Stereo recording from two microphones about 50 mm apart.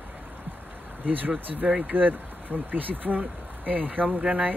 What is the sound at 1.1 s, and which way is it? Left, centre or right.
Speech, right.